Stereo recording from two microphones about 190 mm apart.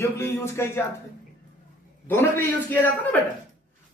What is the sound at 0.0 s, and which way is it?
Speech, 15° left (ahead or behind).